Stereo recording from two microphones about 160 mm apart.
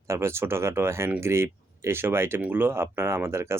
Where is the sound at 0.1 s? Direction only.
15° right (ahead or behind).